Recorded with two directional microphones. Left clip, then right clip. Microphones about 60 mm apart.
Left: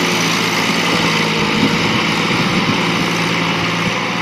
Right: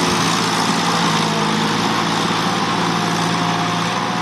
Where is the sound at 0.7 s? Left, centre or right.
Right.